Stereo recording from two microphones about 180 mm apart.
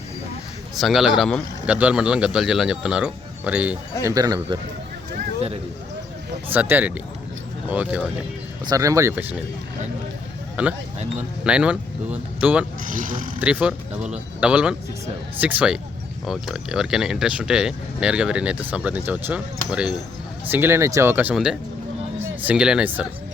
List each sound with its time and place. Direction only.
0.8 s speech: centre (ahead or behind)
4.0 s speech: 20° right (ahead or behind)
6.5 s speech: 10° right (ahead or behind)
8.7 s speech: 20° right (ahead or behind)
10.6 s speech: 10° right (ahead or behind)
12.8 s speech: 50° right (ahead or behind)
13.4 s speech: 5° right (ahead or behind)